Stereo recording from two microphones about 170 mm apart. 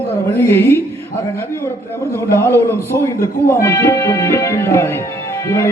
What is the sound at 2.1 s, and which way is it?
A man's voice, 15° left (ahead or behind).